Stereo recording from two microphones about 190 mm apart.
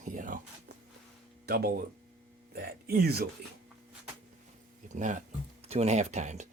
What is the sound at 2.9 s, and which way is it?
Speech, 55° right (ahead or behind).